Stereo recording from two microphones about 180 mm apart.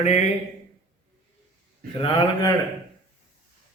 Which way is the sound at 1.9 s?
30° left (ahead or behind).